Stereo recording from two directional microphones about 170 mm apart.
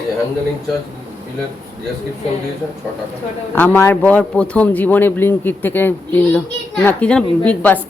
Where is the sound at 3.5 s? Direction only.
10° left (ahead or behind).